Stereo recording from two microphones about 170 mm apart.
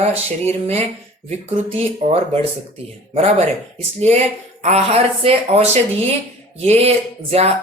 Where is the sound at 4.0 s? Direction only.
40° right (ahead or behind).